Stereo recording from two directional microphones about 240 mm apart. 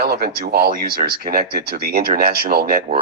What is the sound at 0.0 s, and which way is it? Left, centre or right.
Speech, right.